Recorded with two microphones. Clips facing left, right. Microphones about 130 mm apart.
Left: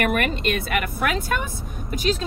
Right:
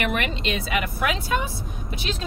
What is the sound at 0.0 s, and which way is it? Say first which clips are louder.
Speech: left 4 dB; 50° left (ahead or behind).